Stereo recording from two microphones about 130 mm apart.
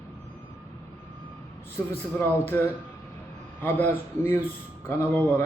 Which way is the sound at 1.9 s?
15° left (ahead or behind).